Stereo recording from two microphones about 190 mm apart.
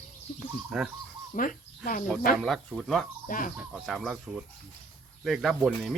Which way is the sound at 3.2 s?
45° left (ahead or behind).